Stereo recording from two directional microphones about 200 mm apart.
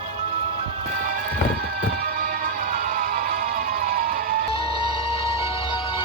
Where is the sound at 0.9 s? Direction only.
45° right (ahead or behind).